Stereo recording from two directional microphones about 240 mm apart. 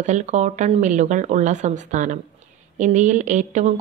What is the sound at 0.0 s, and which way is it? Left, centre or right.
Speech, right.